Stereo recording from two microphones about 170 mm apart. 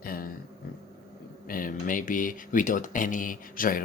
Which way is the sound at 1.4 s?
55° left (ahead or behind).